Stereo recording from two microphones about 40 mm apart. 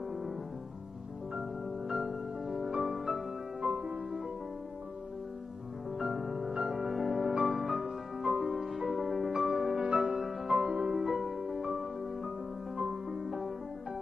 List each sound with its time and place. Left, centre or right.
0.1 s music: centre
1.9 s music: centre
3.6 s music: right
5.9 s music: centre
6.5 s music: centre
6.9 s music: centre
9.3 s music: centre
10.6 s music: centre
11.1 s music: centre